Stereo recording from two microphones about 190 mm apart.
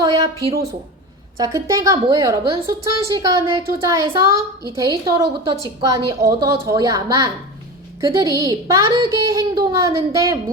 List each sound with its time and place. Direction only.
0.0 s a woman's voice: 20° right (ahead or behind)